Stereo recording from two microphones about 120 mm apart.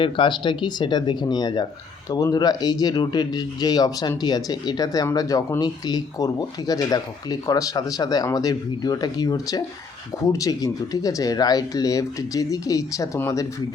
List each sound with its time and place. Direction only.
0.0 s speech: 45° left (ahead or behind); by 13.5 s 25° left (ahead or behind)